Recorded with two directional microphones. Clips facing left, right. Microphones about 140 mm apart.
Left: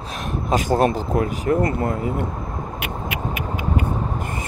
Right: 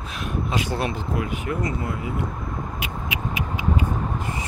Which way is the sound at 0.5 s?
45° left (ahead or behind).